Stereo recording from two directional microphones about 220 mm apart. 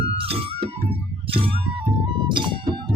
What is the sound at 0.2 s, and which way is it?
Music, 25° right (ahead or behind).